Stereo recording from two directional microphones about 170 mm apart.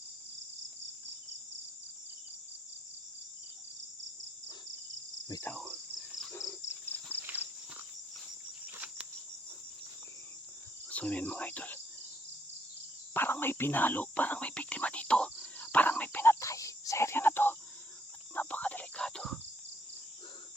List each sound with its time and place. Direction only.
5.3 s cricket: 15° left (ahead or behind)
5.5 s cricket: 5° right (ahead or behind)
6.3 s cricket: 20° left (ahead or behind)
6.7 s bird: 10° left (ahead or behind)
7.2 s walk: 10° right (ahead or behind)
8.6 s a sound: 10° right (ahead or behind)
10.8 s cricket: 10° left (ahead or behind)
13.1 s whispering: 10° left (ahead or behind)
18.3 s cricket: 10° left (ahead or behind)